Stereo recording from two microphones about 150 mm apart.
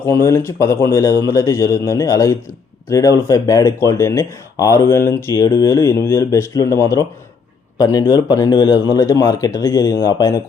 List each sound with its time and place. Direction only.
0.0 s speech: 15° left (ahead or behind)